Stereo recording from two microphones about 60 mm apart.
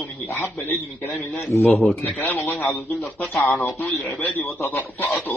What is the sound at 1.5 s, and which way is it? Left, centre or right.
Speech, left.